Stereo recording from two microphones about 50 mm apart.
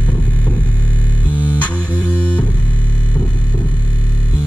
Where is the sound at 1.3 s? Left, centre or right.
Right.